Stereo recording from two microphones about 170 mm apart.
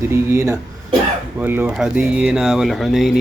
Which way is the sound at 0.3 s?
15° right (ahead or behind).